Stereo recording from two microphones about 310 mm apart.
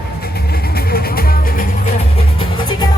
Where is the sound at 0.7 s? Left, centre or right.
Left.